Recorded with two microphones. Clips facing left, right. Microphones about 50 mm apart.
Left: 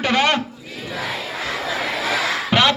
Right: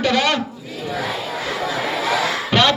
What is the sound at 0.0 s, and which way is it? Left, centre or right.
Speech, left.